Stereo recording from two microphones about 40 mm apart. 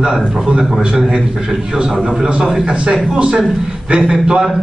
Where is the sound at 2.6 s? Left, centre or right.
Right.